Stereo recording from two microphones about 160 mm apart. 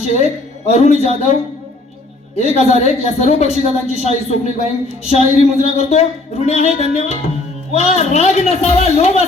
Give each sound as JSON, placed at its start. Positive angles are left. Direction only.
{"t": 0.2, "sound": "a man's voice", "side_deg": 45}